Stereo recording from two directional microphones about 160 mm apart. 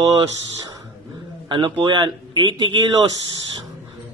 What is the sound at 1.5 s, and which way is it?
A man's voice, 30° right (ahead or behind).